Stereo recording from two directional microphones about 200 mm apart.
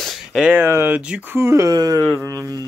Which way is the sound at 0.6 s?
10° right (ahead or behind).